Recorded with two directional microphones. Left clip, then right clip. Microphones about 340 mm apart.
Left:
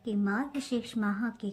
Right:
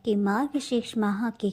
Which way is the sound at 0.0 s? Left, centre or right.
Centre.